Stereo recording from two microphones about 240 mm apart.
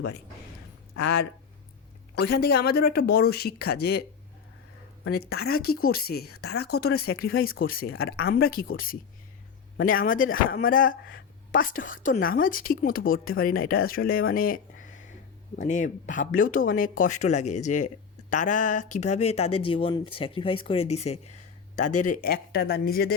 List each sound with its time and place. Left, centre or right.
2.1 s speech: left
5.1 s speech: left
7.1 s speech: left
7.7 s speech: left
7.9 s speech: left
8.3 s speech: left